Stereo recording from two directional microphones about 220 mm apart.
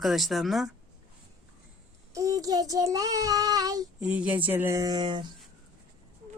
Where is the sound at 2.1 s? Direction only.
15° right (ahead or behind).